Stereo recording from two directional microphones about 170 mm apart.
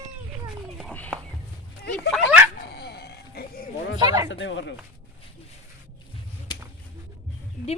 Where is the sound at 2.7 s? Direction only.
70° left (ahead or behind).